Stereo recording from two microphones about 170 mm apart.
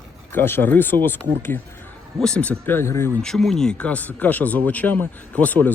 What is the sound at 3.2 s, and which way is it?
Speech, 5° left (ahead or behind).